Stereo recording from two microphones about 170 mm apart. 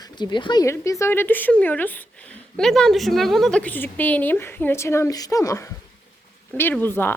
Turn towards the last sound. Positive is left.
turn(degrees=10)  # may be behind; listen again after turning